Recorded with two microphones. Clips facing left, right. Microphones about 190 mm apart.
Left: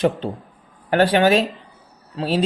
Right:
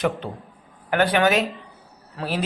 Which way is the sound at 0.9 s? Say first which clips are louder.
Left 4 dB; 30° left (ahead or behind).